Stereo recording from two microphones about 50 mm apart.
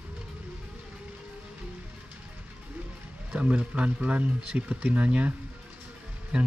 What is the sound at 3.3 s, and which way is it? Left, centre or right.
Speech, right.